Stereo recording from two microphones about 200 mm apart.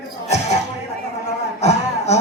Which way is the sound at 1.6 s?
35° left (ahead or behind).